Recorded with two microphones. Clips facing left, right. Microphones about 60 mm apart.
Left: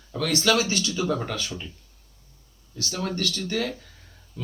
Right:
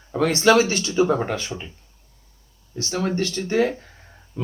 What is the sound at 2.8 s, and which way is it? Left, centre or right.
Speech, right.